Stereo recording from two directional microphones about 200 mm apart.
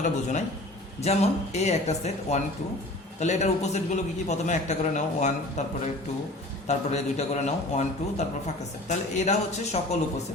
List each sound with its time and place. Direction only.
0.0 s a man's voice: 35° left (ahead or behind)
6.7 s a man's voice: 35° left (ahead or behind)
8.9 s a man's voice: 35° left (ahead or behind)